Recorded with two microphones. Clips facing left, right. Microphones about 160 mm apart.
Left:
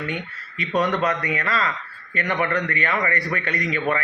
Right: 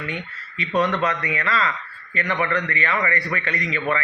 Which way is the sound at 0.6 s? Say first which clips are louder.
Even; 40° left (ahead or behind).